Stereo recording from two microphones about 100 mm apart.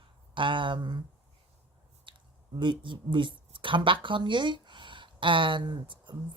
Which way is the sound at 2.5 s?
55° right (ahead or behind).